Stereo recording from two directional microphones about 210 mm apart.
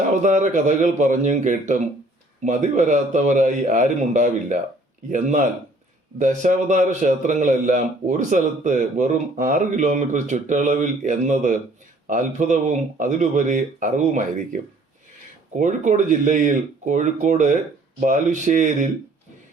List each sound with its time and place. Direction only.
0.1 s a man's voice: 35° right (ahead or behind)
6.1 s a man's voice: 35° right (ahead or behind)